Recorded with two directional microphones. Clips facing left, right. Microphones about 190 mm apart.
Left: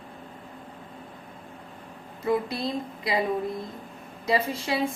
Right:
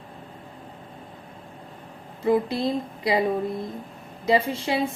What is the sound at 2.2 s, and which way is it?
Speech, 25° right (ahead or behind).